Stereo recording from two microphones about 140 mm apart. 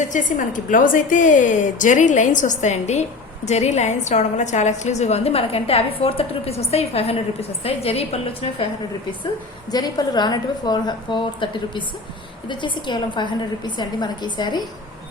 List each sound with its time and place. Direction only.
0.0 s a woman's voice: 65° left (ahead or behind); by 8.6 s 45° left (ahead or behind)
9.7 s a woman's voice: 30° left (ahead or behind)